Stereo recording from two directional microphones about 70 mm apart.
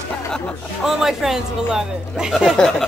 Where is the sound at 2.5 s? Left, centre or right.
Centre.